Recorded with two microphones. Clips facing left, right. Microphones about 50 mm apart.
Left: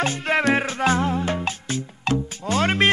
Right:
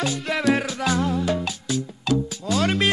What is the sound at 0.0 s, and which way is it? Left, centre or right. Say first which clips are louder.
Music: left 2 dB; left.